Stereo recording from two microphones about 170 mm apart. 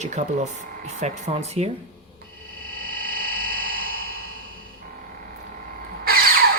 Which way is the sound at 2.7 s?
60° right (ahead or behind).